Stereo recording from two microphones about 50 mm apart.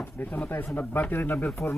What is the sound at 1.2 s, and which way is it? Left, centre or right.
Speech, left.